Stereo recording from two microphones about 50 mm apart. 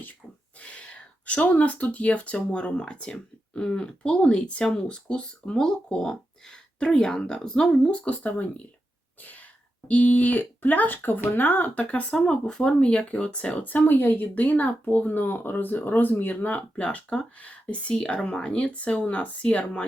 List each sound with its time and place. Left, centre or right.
0.6 s speech: left
9.9 s speech: left
16.7 s speech: left